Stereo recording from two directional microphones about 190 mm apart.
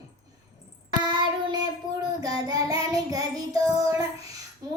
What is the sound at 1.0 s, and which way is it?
Child singing, 25° right (ahead or behind).